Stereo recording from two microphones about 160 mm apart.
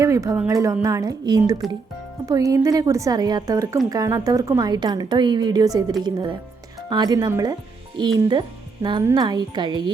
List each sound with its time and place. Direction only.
0.0 s a woman's voice: 20° right (ahead or behind)